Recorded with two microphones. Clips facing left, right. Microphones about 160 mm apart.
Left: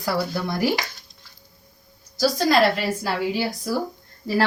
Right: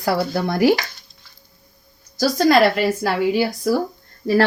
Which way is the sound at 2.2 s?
55° right (ahead or behind).